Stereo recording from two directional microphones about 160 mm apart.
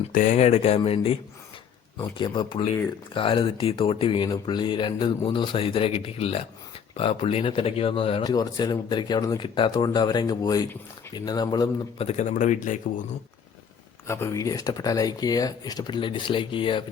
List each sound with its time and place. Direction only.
0.1 s speech: 55° left (ahead or behind); by 8.2 s 35° left (ahead or behind)
8.2 s speech: 25° left (ahead or behind)
11.9 s speech: 40° left (ahead or behind)
14.1 s speech: 20° left (ahead or behind)